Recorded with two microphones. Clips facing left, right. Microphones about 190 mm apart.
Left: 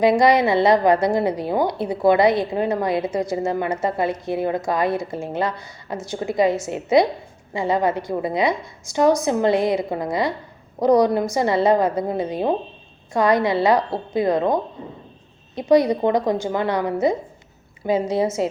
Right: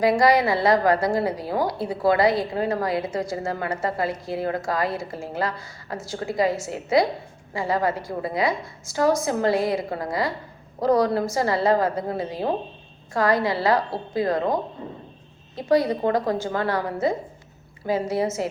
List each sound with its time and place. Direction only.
0.0 s a woman's voice: 20° left (ahead or behind)
15.5 s a woman's voice: 20° left (ahead or behind)